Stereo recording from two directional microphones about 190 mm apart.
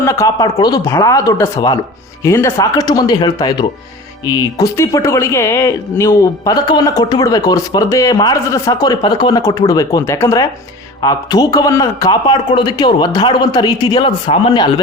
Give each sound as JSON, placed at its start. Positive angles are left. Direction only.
{"t": 0.0, "sound": "speech", "side_deg": 15}